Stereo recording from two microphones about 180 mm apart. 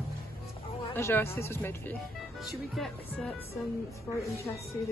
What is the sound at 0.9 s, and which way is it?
A woman's voice, 15° left (ahead or behind).